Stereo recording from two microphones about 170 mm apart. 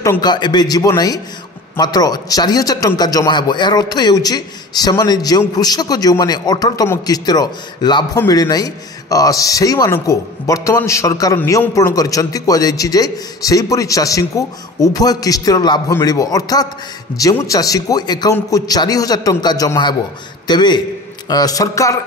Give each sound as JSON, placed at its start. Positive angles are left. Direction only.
{"t": 0.0, "sound": "a man's voice", "side_deg": 20}